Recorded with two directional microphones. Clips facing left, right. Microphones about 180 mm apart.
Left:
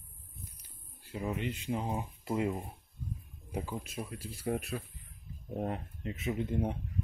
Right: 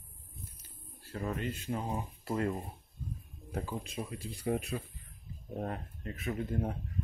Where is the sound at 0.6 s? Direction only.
15° left (ahead or behind).